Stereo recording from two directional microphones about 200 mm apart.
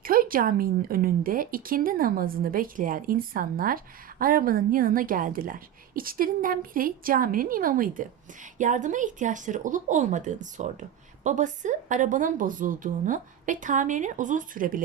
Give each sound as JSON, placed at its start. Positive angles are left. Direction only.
{"t": 0.0, "sound": "a woman's voice", "side_deg": -45}